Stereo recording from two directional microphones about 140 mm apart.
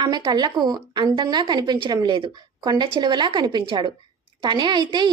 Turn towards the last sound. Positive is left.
turn(degrees=-30)  # may be behind; listen again after turning